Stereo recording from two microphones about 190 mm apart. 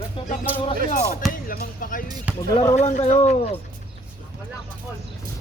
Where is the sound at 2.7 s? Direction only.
35° left (ahead or behind).